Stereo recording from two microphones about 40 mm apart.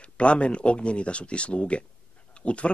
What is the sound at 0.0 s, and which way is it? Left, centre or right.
Speech, left.